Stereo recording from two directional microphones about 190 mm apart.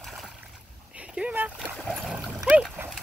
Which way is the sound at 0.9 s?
5° right (ahead or behind).